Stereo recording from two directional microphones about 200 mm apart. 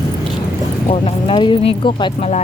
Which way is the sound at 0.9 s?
30° left (ahead or behind).